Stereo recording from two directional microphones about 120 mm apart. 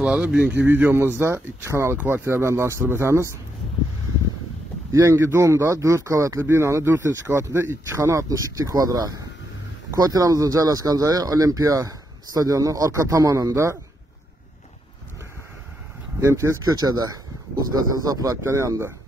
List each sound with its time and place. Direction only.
0.0 s a man's voice: 10° right (ahead or behind)
4.9 s speech: 25° right (ahead or behind)
16.2 s speech: 25° right (ahead or behind)